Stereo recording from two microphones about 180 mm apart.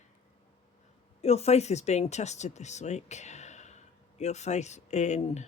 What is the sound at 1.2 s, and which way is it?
Speech, 35° left (ahead or behind).